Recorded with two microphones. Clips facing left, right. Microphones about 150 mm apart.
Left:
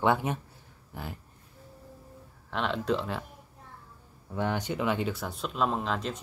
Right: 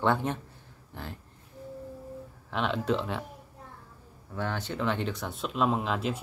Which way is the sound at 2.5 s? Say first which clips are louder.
Right 1 dB; centre (ahead or behind).